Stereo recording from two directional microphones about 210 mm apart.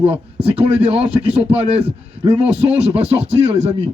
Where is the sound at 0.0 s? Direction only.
30° right (ahead or behind).